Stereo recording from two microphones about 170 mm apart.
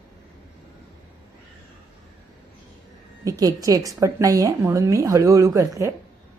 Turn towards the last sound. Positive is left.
turn(degrees=-20)  # may be behind; listen again after turning